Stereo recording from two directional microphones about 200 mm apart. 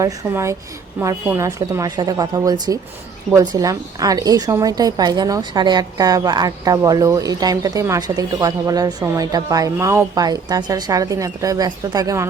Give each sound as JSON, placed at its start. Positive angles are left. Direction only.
{"t": 0.0, "sound": "a woman's voice", "side_deg": -15}